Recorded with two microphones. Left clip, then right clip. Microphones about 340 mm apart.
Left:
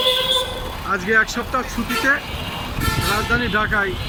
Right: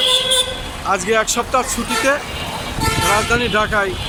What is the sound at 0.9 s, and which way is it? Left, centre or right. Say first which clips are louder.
Speech: right 1 dB; centre.